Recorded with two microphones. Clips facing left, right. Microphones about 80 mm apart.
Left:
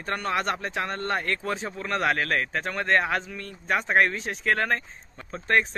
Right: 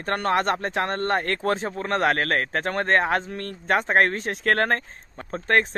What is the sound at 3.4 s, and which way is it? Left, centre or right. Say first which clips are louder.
Speech: right 4 dB; right.